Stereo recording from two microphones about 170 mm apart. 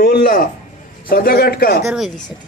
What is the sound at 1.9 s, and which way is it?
Speech, centre (ahead or behind).